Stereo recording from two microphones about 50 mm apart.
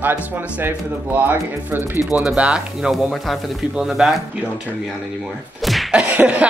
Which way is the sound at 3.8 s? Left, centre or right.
Centre.